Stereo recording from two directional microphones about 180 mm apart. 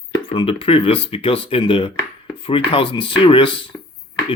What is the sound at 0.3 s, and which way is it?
Speech, 30° left (ahead or behind).